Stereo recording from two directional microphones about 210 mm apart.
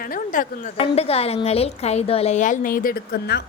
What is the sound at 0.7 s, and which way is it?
A woman's voice, 25° left (ahead or behind).